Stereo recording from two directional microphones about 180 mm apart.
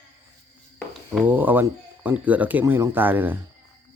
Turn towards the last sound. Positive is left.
turn(degrees=-10)  # may be behind; listen again after turning